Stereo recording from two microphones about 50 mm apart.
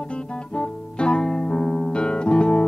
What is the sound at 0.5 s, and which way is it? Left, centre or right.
Music, centre.